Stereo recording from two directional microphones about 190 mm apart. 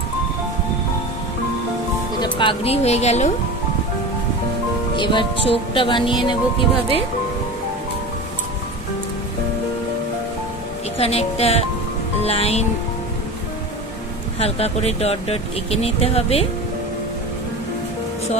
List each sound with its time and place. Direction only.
2.1 s speech: 25° left (ahead or behind)
4.9 s speech: 25° left (ahead or behind)
11.0 s speech: 30° left (ahead or behind)
14.4 s speech: 35° left (ahead or behind)